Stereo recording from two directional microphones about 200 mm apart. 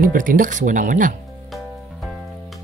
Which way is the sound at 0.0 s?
45° right (ahead or behind).